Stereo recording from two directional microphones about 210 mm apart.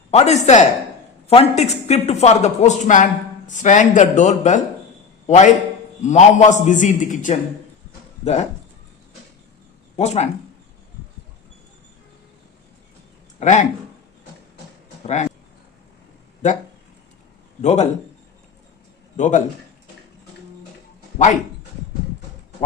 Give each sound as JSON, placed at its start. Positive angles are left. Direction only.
{"t": 0.1, "sound": "a man's voice", "side_deg": 30}
{"t": 10.0, "sound": "speech", "side_deg": 30}
{"t": 13.4, "sound": "speech", "side_deg": 35}
{"t": 15.0, "sound": "speech", "side_deg": 30}
{"t": 17.6, "sound": "speech", "side_deg": 30}
{"t": 19.1, "sound": "a man's voice", "side_deg": 35}